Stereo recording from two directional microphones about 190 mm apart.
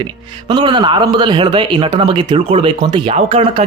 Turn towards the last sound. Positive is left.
turn(degrees=-30)  # may be behind; listen again after turning